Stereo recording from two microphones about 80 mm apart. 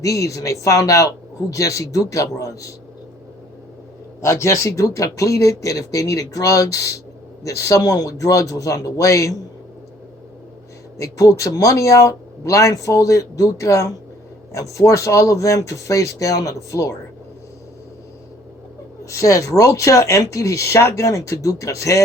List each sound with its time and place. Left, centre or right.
0.0 s speech: left
4.2 s speech: left
10.9 s speech: left
19.0 s speech: left